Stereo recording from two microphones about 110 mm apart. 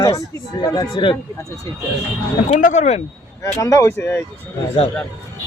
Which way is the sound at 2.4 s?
90° left.